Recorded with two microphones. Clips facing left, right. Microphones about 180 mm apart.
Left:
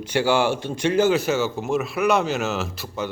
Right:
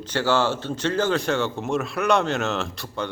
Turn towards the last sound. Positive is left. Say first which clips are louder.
# left 1 dB
turn(degrees=5)  # may be behind; listen again after turning